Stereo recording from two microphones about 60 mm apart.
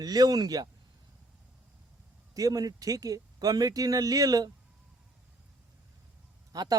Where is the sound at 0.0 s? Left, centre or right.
Right.